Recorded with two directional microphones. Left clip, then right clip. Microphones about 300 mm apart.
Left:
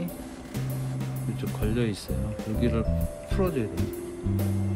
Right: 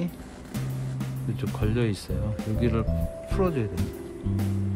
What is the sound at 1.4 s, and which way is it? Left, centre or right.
Speech, right.